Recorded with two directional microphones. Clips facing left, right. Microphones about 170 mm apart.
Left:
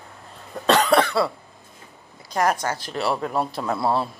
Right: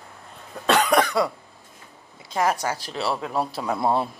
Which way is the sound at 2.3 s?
5° right (ahead or behind).